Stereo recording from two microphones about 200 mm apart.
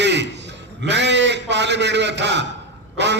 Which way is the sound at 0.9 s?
60° right (ahead or behind).